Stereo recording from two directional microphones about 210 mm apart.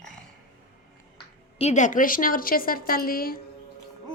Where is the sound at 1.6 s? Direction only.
35° left (ahead or behind).